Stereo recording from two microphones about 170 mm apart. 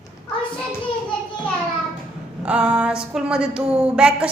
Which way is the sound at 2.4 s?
5° right (ahead or behind).